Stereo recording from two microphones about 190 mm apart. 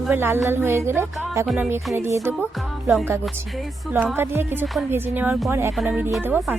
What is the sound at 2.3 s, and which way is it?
Music, 5° right (ahead or behind).